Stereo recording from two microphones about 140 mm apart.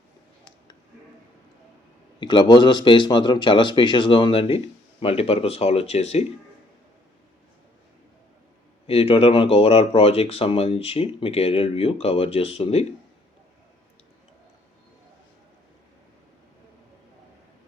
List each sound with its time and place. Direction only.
2.2 s speech: 35° left (ahead or behind); by 6.2 s 50° left (ahead or behind)
8.9 s speech: 45° left (ahead or behind)